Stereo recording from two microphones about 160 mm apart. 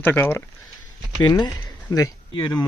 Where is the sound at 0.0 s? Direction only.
10° left (ahead or behind).